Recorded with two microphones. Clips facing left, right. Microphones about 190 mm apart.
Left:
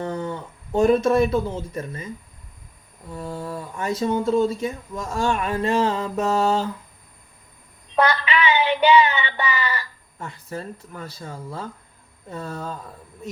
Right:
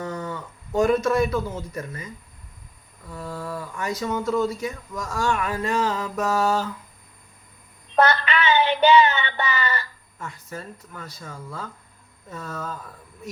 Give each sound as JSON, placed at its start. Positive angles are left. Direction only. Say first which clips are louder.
{"t": 0.0, "sound": "speech", "louder": "left 3 dB", "side_deg": 30}
{"t": 3.1, "sound": "speech", "louder": "left 2 dB", "side_deg": 25}
{"t": 7.9, "sound": "child singing", "louder": "even", "side_deg": 15}
{"t": 10.2, "sound": "speech", "louder": "left 3 dB", "side_deg": 30}